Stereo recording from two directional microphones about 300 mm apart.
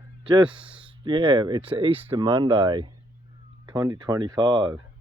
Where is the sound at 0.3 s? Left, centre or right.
Centre.